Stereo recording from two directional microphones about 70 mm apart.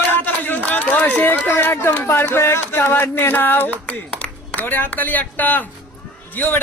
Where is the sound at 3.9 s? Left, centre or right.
Centre.